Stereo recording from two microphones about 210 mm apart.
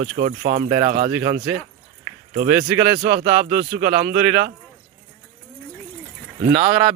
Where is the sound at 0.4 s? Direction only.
45° right (ahead or behind).